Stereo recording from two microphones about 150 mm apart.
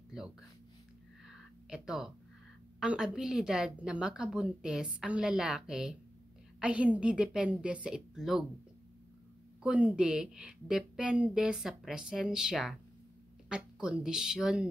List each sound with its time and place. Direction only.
1.2 s a sound: 5° right (ahead or behind)
2.8 s a woman's voice: 5° right (ahead or behind)
9.6 s a woman's voice: 10° right (ahead or behind)